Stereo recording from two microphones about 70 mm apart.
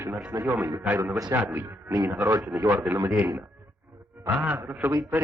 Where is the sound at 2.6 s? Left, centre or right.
Right.